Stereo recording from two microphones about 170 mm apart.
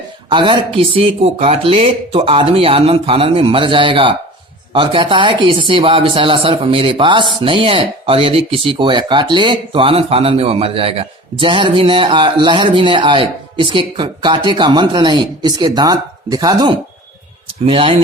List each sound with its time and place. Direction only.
0.3 s speech: 25° right (ahead or behind)